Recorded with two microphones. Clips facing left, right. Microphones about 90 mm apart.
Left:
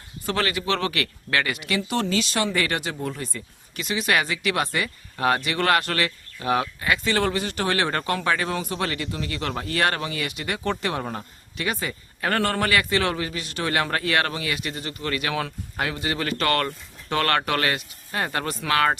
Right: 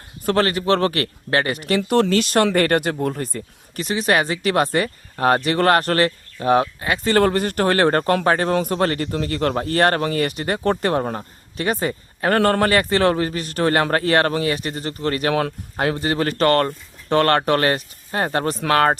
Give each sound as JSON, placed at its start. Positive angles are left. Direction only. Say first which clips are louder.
{"t": 0.3, "sound": "speech", "louder": "right 7 dB", "side_deg": -40}